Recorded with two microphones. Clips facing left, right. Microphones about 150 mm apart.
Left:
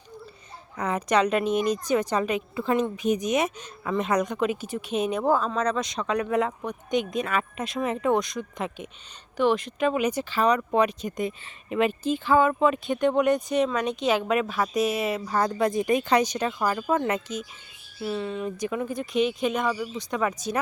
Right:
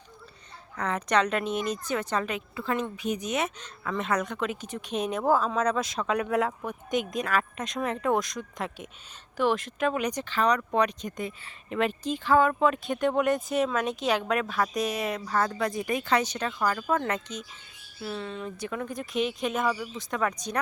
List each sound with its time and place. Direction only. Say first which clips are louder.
0.8 s a woman's voice: left 3 dB; 10° left (ahead or behind)
4.7 s speech: left 4 dB; centre (ahead or behind)
11.8 s speech: left 4 dB; 5° left (ahead or behind)
15.3 s a woman's voice: left 3 dB; 20° left (ahead or behind)